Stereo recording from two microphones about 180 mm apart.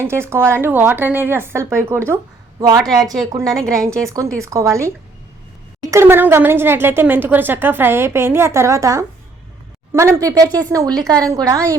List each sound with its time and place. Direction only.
0.0 s speech: 15° right (ahead or behind)
3.4 s a woman's voice: centre (ahead or behind)
3.7 s speech: 15° right (ahead or behind)
5.9 s speech: 15° right (ahead or behind)